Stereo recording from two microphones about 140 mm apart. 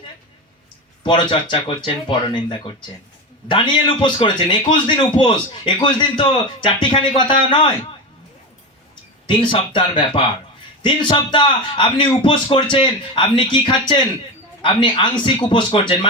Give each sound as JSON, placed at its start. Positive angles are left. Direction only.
{"t": 1.0, "sound": "a man's voice", "side_deg": 35}
{"t": 9.2, "sound": "a man's voice", "side_deg": 35}